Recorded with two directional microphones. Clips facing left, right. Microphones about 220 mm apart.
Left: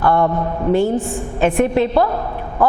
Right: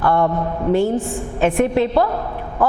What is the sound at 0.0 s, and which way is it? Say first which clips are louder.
A woman's voice: left 1 dB; 25° left (ahead or behind).